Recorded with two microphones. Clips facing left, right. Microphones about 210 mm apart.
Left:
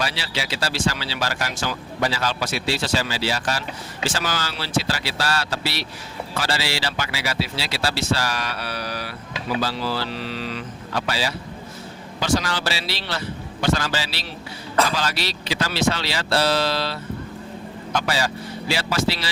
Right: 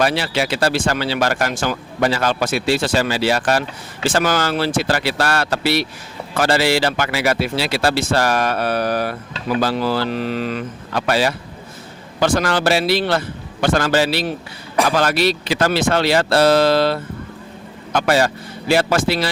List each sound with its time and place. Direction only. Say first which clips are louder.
0.0 s speech: right 9 dB; 55° right (ahead or behind)